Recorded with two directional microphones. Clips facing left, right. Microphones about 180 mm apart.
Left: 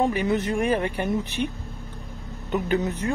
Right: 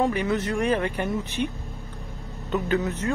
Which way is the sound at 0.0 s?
15° left (ahead or behind).